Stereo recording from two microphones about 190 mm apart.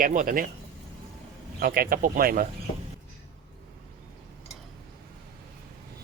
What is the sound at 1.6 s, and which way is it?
Speech, 50° right (ahead or behind).